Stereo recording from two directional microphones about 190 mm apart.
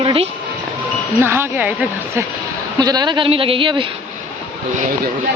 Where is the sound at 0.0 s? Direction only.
30° right (ahead or behind).